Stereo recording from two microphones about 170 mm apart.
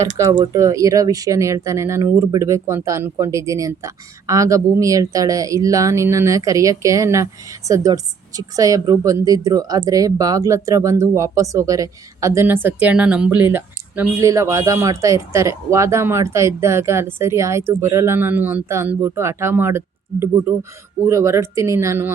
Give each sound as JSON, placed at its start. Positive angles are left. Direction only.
{"t": 0.2, "sound": "speech", "side_deg": -20}